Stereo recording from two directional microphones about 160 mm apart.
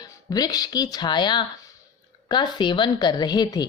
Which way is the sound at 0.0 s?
25° left (ahead or behind).